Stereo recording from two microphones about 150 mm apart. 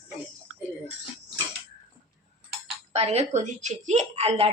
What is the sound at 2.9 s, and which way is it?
Speech, 45° right (ahead or behind).